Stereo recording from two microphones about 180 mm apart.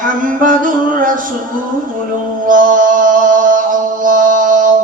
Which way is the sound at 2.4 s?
45° right (ahead or behind).